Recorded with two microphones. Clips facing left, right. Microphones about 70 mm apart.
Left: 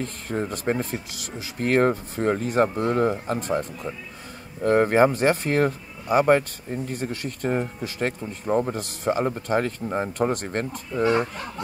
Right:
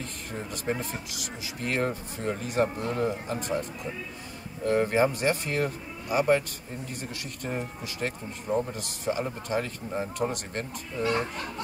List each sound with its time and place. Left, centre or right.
0.0 s speech: left